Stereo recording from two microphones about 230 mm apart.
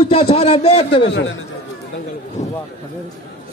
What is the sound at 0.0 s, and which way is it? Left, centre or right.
A man's voice, left.